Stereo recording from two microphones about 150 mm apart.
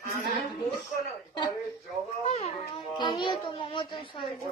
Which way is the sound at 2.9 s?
30° left (ahead or behind).